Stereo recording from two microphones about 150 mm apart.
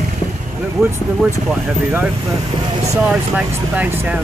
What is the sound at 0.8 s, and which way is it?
Speech, 5° right (ahead or behind).